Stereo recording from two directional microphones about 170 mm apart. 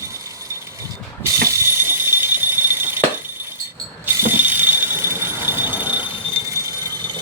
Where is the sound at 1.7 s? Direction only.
15° right (ahead or behind).